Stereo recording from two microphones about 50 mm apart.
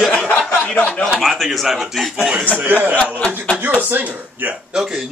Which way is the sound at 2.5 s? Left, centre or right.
Right.